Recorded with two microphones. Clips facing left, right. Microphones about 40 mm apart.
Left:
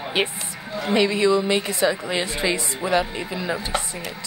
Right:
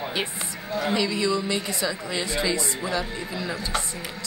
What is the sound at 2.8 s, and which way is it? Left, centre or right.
Speech, left.